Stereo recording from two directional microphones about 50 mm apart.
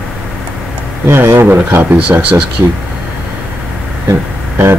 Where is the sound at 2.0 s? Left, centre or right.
Right.